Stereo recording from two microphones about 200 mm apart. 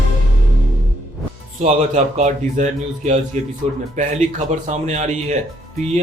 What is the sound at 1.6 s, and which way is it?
Speech, 35° right (ahead or behind).